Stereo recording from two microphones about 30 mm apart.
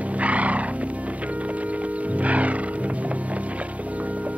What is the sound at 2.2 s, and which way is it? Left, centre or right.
Music, right.